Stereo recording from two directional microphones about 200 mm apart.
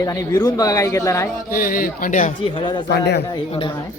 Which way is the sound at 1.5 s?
45° left (ahead or behind).